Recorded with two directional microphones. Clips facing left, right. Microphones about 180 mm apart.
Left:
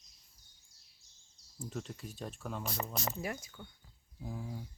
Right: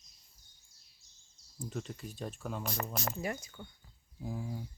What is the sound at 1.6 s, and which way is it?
Speech, centre (ahead or behind).